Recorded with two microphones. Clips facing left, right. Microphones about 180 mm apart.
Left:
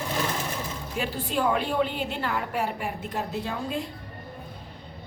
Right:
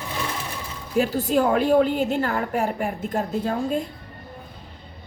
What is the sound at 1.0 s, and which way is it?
A woman's voice, 40° right (ahead or behind).